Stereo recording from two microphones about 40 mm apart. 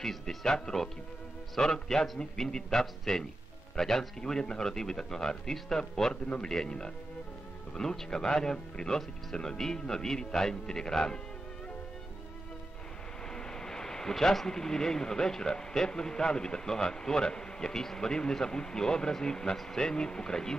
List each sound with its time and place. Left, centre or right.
0.0 s speech: centre
13.3 s speech: centre